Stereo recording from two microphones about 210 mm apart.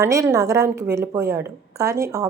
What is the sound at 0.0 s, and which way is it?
A woman's voice, 15° right (ahead or behind).